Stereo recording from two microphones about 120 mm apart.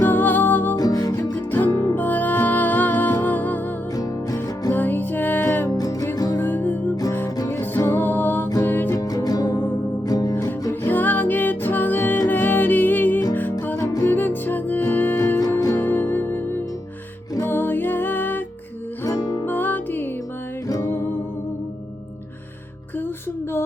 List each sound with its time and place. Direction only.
0.0 s music: 15° left (ahead or behind)
0.8 s music: 30° left (ahead or behind); by 3.6 s 15° left (ahead or behind)
3.9 s music: 30° left (ahead or behind)
4.7 s music: 15° left (ahead or behind)
6.3 s music: 15° left (ahead or behind)
7.3 s music: 30° left (ahead or behind)
9.0 s music: 30° left (ahead or behind)
10.7 s music: 15° left (ahead or behind)
19.0 s music: 30° left (ahead or behind)
19.5 s music: 15° left (ahead or behind)